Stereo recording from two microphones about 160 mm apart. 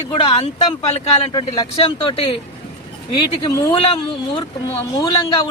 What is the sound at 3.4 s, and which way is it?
Speech, 20° left (ahead or behind).